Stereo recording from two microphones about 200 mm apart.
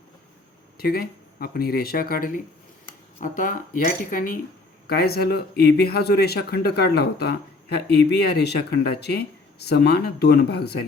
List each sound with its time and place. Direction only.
0.8 s speech: 50° left (ahead or behind)